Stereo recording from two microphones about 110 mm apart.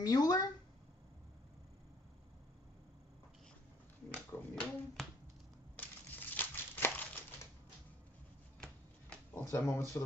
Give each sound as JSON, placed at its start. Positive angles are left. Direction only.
{"t": 0.0, "sound": "speech", "side_deg": 35}
{"t": 4.1, "sound": "a sound", "side_deg": 10}
{"t": 5.8, "sound": "crumpling", "side_deg": 15}
{"t": 9.3, "sound": "speech", "side_deg": 25}